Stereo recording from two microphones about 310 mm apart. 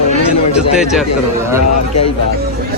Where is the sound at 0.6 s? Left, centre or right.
Centre.